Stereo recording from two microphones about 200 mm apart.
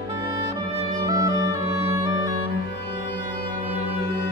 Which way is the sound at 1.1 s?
15° right (ahead or behind).